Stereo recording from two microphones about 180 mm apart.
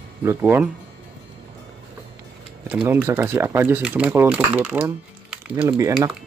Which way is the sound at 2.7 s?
10° right (ahead or behind).